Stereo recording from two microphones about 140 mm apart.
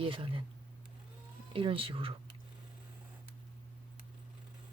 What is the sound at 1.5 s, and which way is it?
Speech, 40° right (ahead or behind).